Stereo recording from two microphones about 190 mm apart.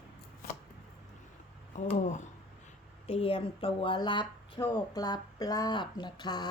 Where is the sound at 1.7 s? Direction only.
40° left (ahead or behind).